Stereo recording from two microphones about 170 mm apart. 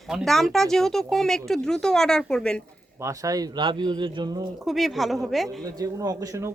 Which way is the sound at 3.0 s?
20° right (ahead or behind).